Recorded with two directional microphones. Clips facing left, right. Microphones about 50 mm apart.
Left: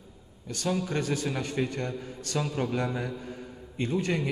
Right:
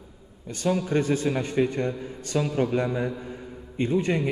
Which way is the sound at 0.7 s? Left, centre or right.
Centre.